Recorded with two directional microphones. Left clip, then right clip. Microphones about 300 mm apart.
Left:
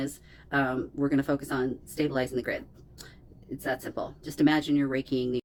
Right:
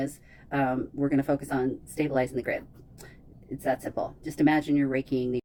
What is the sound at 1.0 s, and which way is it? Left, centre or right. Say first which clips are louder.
Speech: right 1 dB; centre.